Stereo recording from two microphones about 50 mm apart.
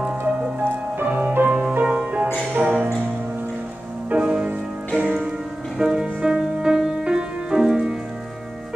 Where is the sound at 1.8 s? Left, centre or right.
Right.